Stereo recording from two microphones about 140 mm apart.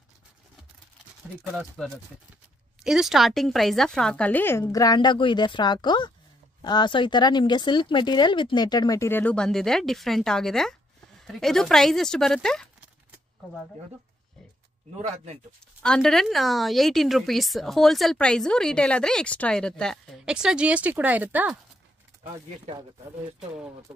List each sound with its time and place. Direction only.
1.8 s a woman's voice: 5° left (ahead or behind); by 9.2 s 20° left (ahead or behind)
9.2 s speech: 5° left (ahead or behind)
15.0 s speech: 50° right (ahead or behind)
15.8 s speech: 5° left (ahead or behind)
20.2 s a woman's voice: 5° right (ahead or behind)